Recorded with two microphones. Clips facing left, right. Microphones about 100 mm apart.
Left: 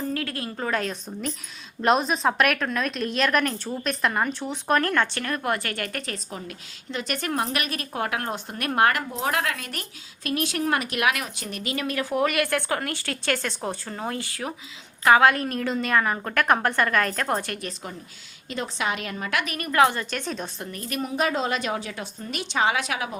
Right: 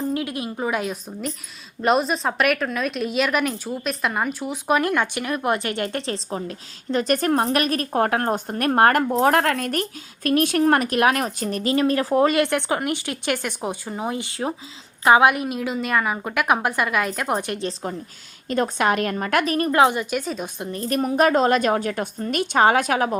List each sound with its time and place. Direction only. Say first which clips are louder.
0.1 s a woman's voice: right 4 dB; 15° right (ahead or behind)
18.4 s a woman's voice: right 8 dB; 50° right (ahead or behind); by 20.5 s 5° right (ahead or behind)
20.7 s a woman's voice: right 7 dB; 35° right (ahead or behind)